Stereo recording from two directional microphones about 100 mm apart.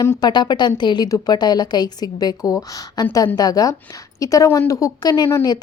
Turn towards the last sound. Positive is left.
turn(degrees=35)  # may be behind; listen again after turning